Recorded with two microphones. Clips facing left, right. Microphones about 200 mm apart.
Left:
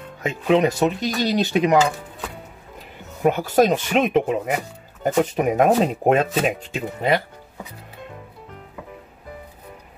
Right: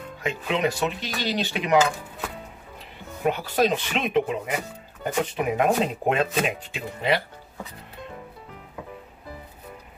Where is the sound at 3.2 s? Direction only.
45° left (ahead or behind).